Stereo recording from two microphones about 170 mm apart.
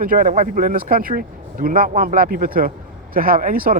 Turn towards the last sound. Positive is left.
turn(degrees=-55)  # may be behind; listen again after turning